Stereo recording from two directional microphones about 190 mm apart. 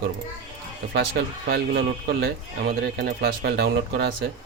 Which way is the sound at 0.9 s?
60° right (ahead or behind).